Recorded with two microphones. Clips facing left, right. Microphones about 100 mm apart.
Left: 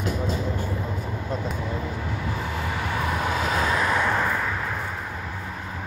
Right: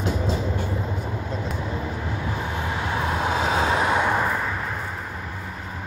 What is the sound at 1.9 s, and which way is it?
Vehicle, 40° right (ahead or behind).